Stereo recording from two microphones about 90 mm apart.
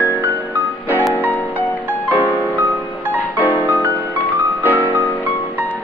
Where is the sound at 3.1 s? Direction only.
20° left (ahead or behind).